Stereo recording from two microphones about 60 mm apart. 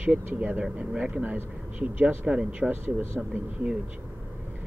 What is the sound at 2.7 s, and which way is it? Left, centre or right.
Speech, right.